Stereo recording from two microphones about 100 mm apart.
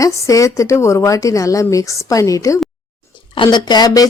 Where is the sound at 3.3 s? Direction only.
50° left (ahead or behind).